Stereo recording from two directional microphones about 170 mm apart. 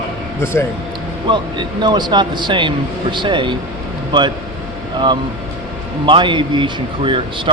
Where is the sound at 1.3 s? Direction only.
25° right (ahead or behind).